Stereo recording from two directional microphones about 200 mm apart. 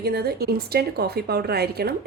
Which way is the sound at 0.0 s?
55° right (ahead or behind).